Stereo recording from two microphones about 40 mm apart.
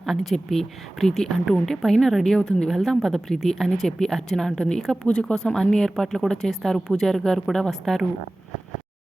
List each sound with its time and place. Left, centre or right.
0.0 s a woman's voice: centre
2.4 s a woman's voice: left
2.6 s speech: centre
6.5 s a woman's voice: centre
6.9 s speech: centre